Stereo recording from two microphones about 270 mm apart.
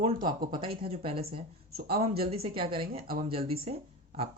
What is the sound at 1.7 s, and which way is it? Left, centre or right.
Speech, right.